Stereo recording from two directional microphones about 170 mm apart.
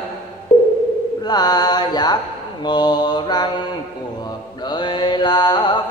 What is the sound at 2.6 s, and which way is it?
Mantra, 25° left (ahead or behind).